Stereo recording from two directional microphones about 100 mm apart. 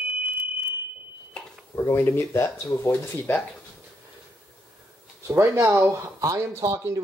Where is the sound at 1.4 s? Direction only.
5° left (ahead or behind).